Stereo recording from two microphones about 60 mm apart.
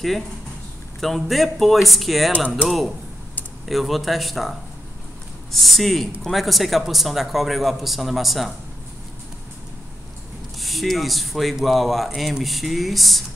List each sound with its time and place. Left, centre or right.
1.0 s speech: centre
3.6 s speech: centre
10.6 s speech: centre